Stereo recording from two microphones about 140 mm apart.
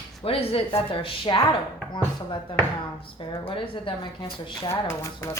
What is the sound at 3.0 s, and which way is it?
Speech, 40° left (ahead or behind).